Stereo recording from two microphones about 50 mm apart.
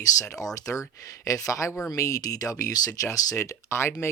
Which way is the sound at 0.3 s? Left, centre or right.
Left.